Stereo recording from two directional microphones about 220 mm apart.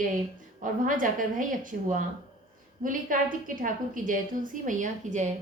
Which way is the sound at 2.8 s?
40° right (ahead or behind).